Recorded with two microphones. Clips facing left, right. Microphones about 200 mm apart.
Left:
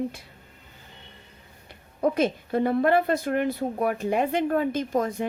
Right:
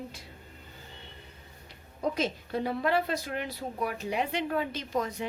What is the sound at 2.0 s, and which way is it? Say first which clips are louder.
A woman's voice: left 7 dB; 55° left (ahead or behind).